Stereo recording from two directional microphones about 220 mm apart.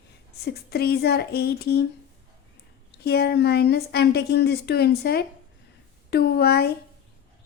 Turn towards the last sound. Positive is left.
turn(degrees=45)  # may be behind; listen again after turning